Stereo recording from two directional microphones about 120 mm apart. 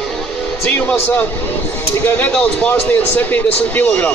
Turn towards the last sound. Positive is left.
turn(degrees=15)  # may be behind; listen again after turning